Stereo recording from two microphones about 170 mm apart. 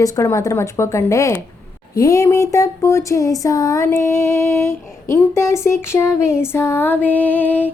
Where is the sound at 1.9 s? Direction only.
20° left (ahead or behind).